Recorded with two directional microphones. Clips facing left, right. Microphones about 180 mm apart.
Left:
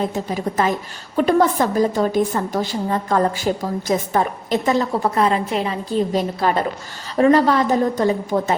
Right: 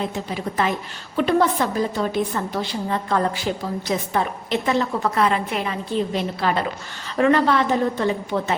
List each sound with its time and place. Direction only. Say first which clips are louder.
0.0 s a woman's voice: left 4 dB; 40° left (ahead or behind)